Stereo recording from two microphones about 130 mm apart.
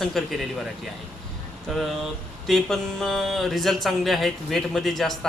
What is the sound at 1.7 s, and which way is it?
Speech, centre (ahead or behind).